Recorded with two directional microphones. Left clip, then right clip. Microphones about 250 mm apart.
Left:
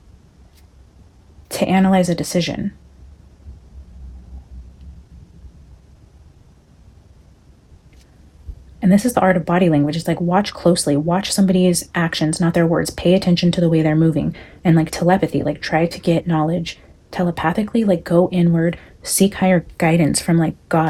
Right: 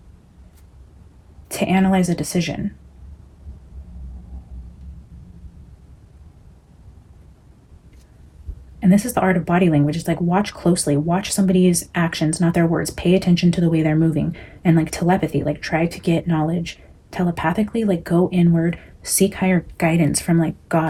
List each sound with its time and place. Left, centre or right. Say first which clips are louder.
1.5 s speech: left 2 dB; left
8.8 s speech: left 3 dB; left